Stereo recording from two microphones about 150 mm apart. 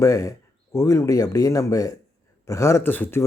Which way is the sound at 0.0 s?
20° left (ahead or behind).